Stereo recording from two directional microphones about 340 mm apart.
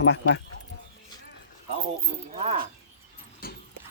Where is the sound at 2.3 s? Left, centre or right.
Centre.